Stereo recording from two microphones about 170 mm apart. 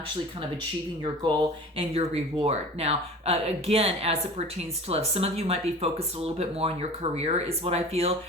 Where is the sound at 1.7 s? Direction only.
35° right (ahead or behind).